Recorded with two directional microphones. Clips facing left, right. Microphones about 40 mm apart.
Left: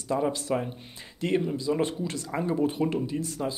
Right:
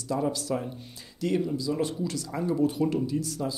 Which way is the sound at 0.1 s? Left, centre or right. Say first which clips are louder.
Left 2 dB; left.